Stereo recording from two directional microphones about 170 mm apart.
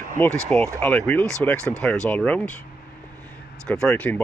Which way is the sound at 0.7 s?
5° left (ahead or behind).